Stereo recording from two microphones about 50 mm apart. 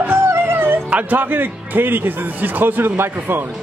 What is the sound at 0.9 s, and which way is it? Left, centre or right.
A man's voice, right.